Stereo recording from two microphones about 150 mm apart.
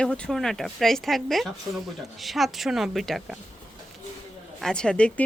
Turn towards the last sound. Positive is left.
turn(degrees=5)  # may be behind; listen again after turning